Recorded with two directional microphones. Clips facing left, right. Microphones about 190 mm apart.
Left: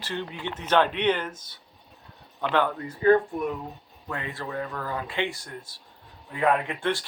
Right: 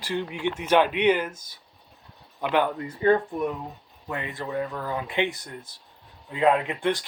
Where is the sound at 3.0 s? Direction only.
25° right (ahead or behind).